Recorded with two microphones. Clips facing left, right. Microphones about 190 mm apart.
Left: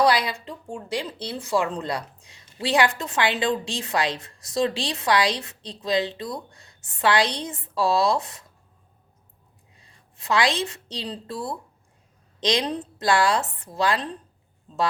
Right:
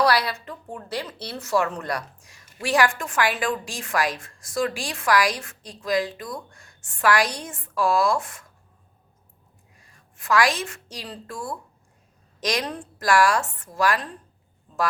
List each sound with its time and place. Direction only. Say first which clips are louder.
0.0 s a sound: left 1 dB; 20° left (ahead or behind)
0.7 s a woman's voice: left 2 dB; 15° left (ahead or behind); by 6.4 s 35° left (ahead or behind)
6.8 s a woman's voice: even; 20° left (ahead or behind)
9.9 s a woman's voice: right 1 dB; 20° left (ahead or behind)
12.5 s a woman's voice: left 3 dB; 20° left (ahead or behind)